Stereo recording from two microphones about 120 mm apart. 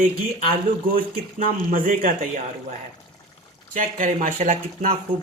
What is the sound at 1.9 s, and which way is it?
Speech, 90° right.